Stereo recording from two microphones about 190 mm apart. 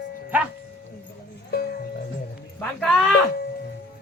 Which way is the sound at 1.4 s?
55° left (ahead or behind).